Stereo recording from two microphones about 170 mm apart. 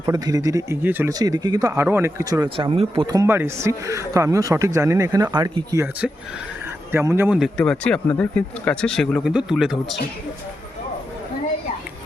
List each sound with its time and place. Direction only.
0.0 s speech: 20° right (ahead or behind)
1.2 s speech: 25° right (ahead or behind)
6.9 s speech: 15° right (ahead or behind)
7.3 s speech: centre (ahead or behind)